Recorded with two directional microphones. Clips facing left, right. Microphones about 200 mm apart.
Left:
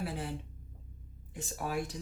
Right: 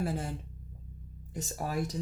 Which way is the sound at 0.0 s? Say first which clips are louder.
Right 4 dB; 45° right (ahead or behind).